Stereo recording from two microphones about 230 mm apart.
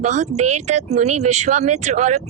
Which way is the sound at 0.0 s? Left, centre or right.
Right.